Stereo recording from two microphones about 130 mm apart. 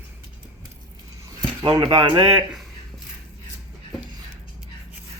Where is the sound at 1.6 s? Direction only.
30° right (ahead or behind).